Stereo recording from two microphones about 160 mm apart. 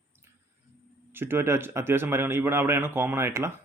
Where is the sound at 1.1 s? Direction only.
15° right (ahead or behind).